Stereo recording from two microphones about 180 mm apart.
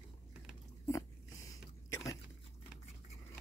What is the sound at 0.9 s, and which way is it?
Dog, 15° left (ahead or behind).